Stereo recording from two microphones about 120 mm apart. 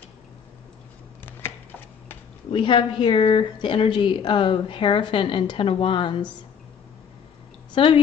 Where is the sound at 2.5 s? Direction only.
45° left (ahead or behind).